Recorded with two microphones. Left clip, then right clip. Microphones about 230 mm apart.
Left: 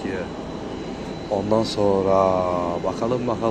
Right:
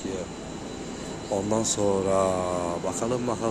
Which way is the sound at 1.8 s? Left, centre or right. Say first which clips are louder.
Left 5 dB; centre.